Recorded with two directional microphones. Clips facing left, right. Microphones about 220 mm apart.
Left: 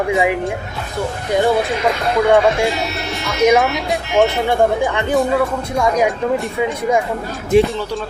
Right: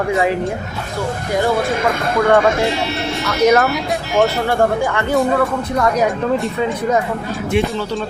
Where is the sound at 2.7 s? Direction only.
30° right (ahead or behind).